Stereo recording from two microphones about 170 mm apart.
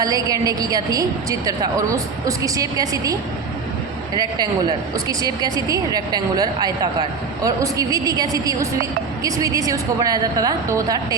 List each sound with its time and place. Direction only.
0.0 s a woman's voice: 20° right (ahead or behind)